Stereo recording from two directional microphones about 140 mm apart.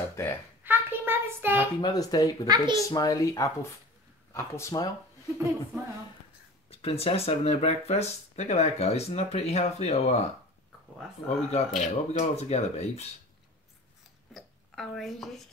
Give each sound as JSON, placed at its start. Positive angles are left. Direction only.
{"t": 0.2, "sound": "a sound", "side_deg": 20}
{"t": 0.7, "sound": "a sound", "side_deg": -15}
{"t": 1.8, "sound": "a child's voice", "side_deg": 30}
{"t": 2.4, "sound": "a child's voice", "side_deg": -30}
{"t": 2.7, "sound": "a child's voice", "side_deg": 25}
{"t": 6.7, "sound": "speech", "side_deg": 45}
{"t": 11.2, "sound": "speech", "side_deg": 50}
{"t": 14.3, "sound": "speech", "side_deg": 0}